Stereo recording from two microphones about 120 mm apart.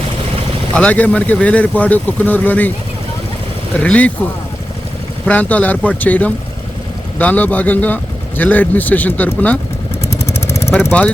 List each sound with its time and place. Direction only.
0.7 s speech: 10° left (ahead or behind)
3.8 s speech: 10° left (ahead or behind)
5.2 s speech: 10° left (ahead or behind)
10.6 s vehicle: 20° left (ahead or behind)